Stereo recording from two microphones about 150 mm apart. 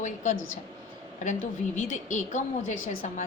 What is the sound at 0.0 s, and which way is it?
A woman's voice, 55° left (ahead or behind).